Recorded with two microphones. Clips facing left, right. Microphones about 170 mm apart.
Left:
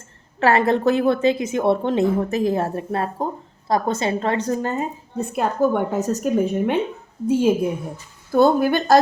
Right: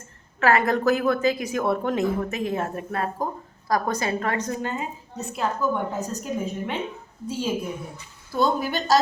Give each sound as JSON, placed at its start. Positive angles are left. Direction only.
{"t": 0.3, "sound": "a woman's voice", "side_deg": 30}
{"t": 5.1, "sound": "a woman's voice", "side_deg": 55}
{"t": 7.3, "sound": "a woman's voice", "side_deg": 55}